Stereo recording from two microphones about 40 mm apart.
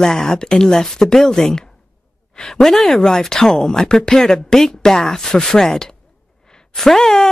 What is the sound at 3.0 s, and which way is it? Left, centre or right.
Speech, centre.